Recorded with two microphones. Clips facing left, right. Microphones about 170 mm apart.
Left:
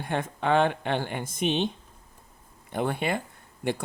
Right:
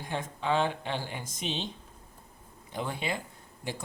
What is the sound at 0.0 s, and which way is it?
Speech, 60° left (ahead or behind).